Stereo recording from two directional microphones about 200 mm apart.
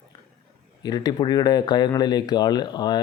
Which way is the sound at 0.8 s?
20° left (ahead or behind).